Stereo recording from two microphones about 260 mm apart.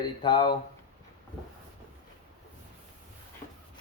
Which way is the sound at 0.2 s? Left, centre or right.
Centre.